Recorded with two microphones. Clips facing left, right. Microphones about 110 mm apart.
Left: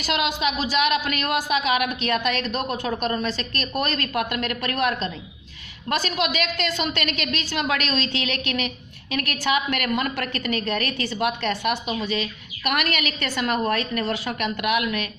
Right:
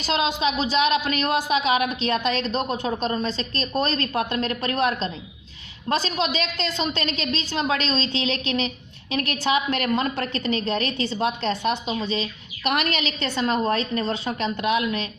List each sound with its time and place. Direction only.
0.0 s a woman's voice: 30° right (ahead or behind)